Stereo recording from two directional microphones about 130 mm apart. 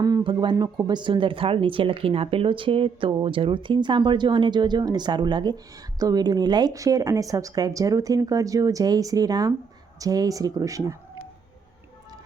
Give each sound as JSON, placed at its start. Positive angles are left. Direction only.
{"t": 0.3, "sound": "speech", "side_deg": -35}